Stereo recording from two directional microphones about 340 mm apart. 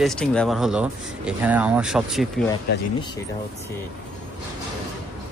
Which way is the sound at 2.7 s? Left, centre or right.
Left.